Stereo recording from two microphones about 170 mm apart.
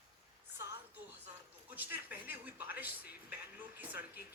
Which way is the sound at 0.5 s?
15° right (ahead or behind).